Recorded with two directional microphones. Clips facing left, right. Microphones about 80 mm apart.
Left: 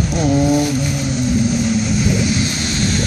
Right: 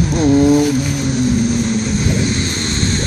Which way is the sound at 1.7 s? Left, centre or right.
Right.